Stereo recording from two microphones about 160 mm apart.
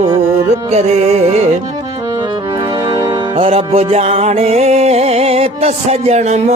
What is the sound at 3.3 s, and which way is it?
Music, 40° right (ahead or behind).